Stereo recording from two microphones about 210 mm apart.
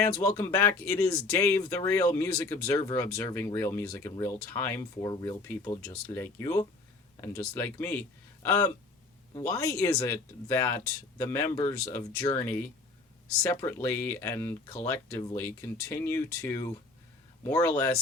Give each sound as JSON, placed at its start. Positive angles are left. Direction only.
{"t": 0.1, "sound": "speech", "side_deg": 10}
{"t": 14.9, "sound": "speech", "side_deg": 25}
{"t": 15.4, "sound": "speech", "side_deg": 10}